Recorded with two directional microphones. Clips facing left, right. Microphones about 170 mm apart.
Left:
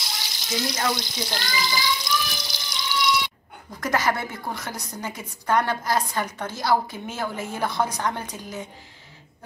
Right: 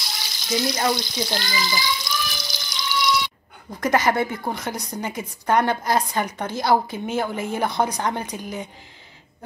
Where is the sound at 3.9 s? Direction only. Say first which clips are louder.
Right 4 dB; 20° right (ahead or behind).